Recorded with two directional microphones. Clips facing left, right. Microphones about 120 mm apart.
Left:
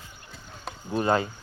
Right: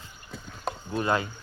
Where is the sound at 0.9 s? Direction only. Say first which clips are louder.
Left 3 dB; 30° left (ahead or behind).